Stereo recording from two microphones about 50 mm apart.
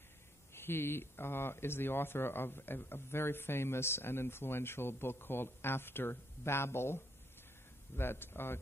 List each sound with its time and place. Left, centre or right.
0.6 s speech: left